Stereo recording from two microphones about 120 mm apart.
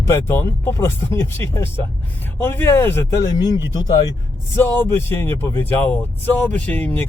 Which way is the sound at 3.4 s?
35° left (ahead or behind).